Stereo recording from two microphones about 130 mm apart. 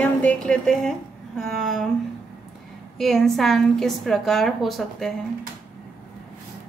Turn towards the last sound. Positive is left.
turn(degrees=0)  # may be behind; listen again after turning